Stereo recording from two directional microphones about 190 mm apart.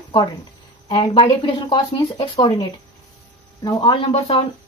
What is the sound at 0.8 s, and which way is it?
Speech, 25° left (ahead or behind).